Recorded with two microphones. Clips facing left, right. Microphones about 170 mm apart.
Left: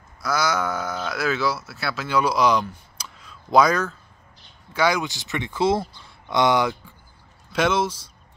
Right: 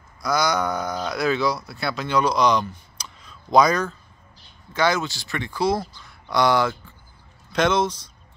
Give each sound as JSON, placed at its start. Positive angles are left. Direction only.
{"t": 0.2, "sound": "speech", "side_deg": 5}
{"t": 7.5, "sound": "speech", "side_deg": 5}